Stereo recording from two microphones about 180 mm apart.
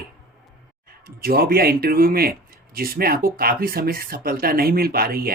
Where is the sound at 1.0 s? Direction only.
55° right (ahead or behind).